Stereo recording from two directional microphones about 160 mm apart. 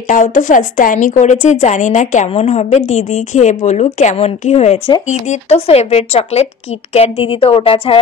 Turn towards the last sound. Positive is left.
turn(degrees=35)  # may be behind; listen again after turning